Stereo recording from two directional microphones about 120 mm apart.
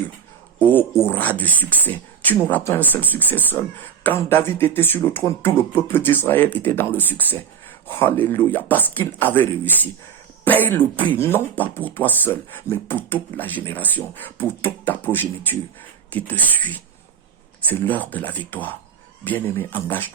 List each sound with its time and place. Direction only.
0.6 s speech: 15° left (ahead or behind)